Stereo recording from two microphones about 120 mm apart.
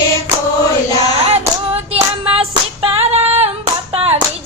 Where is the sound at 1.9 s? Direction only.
50° right (ahead or behind).